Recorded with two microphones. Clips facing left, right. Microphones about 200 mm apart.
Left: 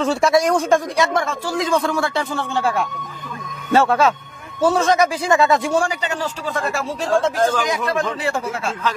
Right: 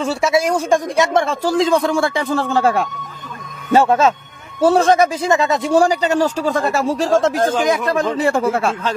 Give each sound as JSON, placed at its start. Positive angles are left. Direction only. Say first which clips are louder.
{"t": 0.0, "sound": "speech", "louder": "left 1 dB", "side_deg": -5}
{"t": 0.7, "sound": "a woman's voice", "louder": "right 2 dB", "side_deg": -15}
{"t": 1.1, "sound": "a man's voice", "louder": "right 5 dB", "side_deg": -30}
{"t": 1.7, "sound": "a woman's voice", "louder": "right 3 dB", "side_deg": -15}
{"t": 2.2, "sound": "a man's voice", "louder": "right 5 dB", "side_deg": -40}
{"t": 3.7, "sound": "speech", "louder": "right 2 dB", "side_deg": -20}
{"t": 4.6, "sound": "speech", "louder": "right 3 dB", "side_deg": -30}
{"t": 5.7, "sound": "a man's voice", "louder": "right 6 dB", "side_deg": -35}
{"t": 7.9, "sound": "a man's voice", "louder": "right 4 dB", "side_deg": -35}
{"t": 8.3, "sound": "speech", "louder": "right 7 dB", "side_deg": -55}